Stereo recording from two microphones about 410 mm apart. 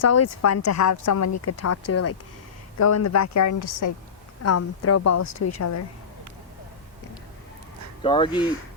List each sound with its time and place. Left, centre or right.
0.0 s speech: left
4.4 s speech: left
8.0 s speech: centre